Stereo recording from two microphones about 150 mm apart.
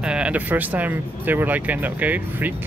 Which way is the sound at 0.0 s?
5° right (ahead or behind).